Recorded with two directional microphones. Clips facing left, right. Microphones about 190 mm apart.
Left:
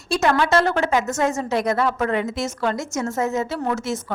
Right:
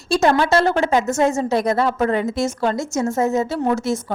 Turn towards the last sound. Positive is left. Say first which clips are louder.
# right 4 dB
turn(degrees=-30)  # may be behind; listen again after turning